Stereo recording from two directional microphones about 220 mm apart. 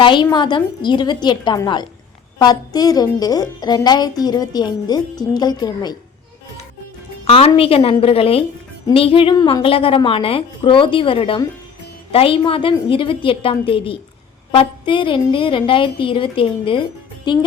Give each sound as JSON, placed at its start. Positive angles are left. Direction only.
{"t": 0.0, "sound": "a woman's voice", "side_deg": 20}
{"t": 7.3, "sound": "a woman's voice", "side_deg": 25}